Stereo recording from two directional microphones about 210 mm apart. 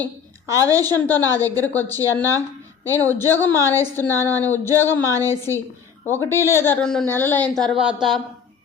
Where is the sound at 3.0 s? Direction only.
10° left (ahead or behind).